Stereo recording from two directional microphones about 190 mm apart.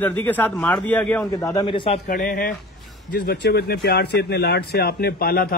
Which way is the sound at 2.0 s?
50° left (ahead or behind).